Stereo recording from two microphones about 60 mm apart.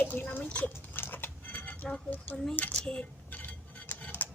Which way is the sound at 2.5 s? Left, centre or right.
Left.